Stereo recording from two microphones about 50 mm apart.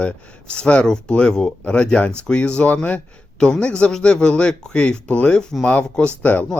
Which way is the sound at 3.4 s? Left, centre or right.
Centre.